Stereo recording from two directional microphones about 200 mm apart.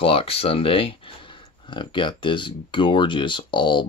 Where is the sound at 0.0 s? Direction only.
30° left (ahead or behind).